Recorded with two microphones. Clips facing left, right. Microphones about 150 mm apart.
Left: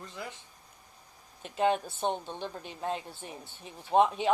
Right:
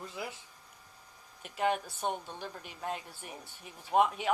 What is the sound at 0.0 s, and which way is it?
Speech, 10° right (ahead or behind).